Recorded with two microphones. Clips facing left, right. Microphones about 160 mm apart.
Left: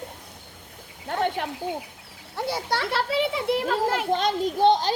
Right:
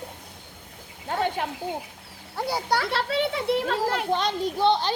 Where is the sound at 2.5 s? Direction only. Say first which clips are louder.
Right 3 dB; 25° left (ahead or behind).